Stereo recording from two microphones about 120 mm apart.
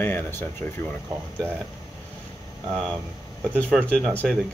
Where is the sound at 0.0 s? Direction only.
20° left (ahead or behind).